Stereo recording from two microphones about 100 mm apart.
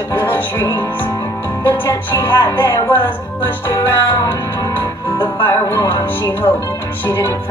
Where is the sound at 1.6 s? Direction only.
25° left (ahead or behind).